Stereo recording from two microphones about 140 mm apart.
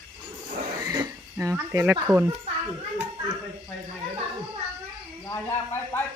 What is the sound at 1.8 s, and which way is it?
Speech, 20° right (ahead or behind).